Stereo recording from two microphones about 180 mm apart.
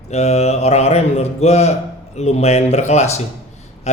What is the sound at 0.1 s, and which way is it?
Speech, 35° left (ahead or behind).